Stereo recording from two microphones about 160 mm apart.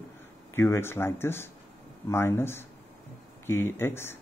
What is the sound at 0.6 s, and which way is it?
Speech, 15° left (ahead or behind).